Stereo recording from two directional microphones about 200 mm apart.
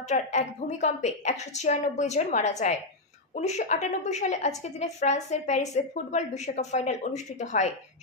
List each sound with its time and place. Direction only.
0.1 s a woman's voice: 35° left (ahead or behind)